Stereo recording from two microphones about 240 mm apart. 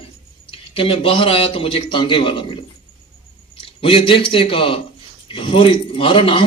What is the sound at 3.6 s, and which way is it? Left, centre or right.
A man's voice, left.